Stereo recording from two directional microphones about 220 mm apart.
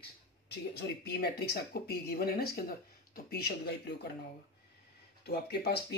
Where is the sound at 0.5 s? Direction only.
50° left (ahead or behind).